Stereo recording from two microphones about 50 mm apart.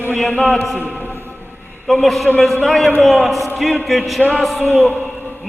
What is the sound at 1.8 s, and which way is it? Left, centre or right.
A man's voice, centre.